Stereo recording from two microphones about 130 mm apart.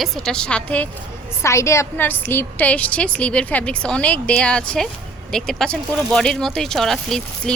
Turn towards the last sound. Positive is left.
turn(degrees=5)  # may be behind; listen again after turning